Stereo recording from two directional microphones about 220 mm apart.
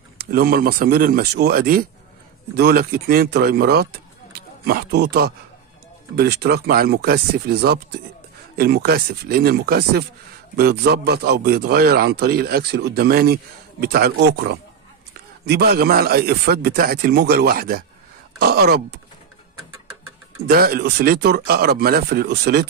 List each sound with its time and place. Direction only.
0.2 s a man's voice: 45° right (ahead or behind)
20.4 s a man's voice: 45° right (ahead or behind)